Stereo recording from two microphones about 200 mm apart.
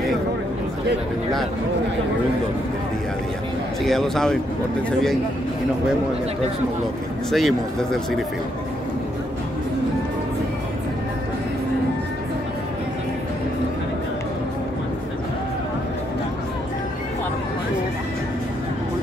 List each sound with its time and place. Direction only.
3.8 s speech: centre (ahead or behind)
7.2 s speech: centre (ahead or behind)